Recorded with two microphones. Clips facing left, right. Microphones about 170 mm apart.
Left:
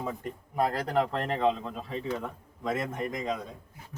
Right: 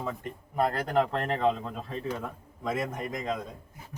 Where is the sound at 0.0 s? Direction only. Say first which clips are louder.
Even; 15° left (ahead or behind).